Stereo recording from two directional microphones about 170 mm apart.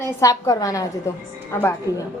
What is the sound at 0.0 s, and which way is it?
A woman's voice, 20° left (ahead or behind).